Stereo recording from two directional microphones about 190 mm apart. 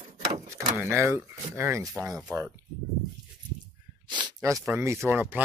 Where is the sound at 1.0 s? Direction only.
15° right (ahead or behind).